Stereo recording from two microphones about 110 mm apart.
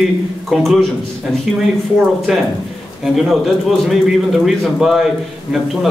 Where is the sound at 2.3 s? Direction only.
5° right (ahead or behind).